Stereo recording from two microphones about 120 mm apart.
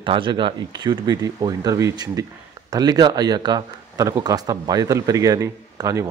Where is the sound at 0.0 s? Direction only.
45° right (ahead or behind).